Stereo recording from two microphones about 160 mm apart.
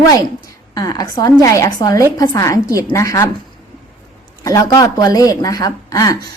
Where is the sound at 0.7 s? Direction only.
20° left (ahead or behind).